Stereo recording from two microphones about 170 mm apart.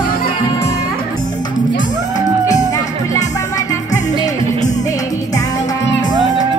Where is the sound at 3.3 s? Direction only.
20° left (ahead or behind).